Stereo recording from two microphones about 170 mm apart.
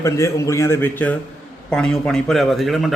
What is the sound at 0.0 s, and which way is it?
A man's voice, 20° left (ahead or behind).